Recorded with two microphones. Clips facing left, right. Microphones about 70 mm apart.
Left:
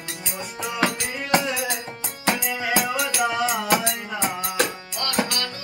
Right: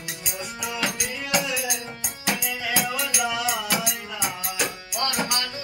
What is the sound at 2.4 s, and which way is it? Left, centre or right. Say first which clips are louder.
Music: left 3 dB; left.